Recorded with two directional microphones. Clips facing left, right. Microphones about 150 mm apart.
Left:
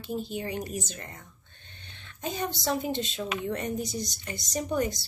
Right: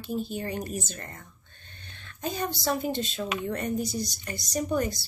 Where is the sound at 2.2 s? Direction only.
20° left (ahead or behind).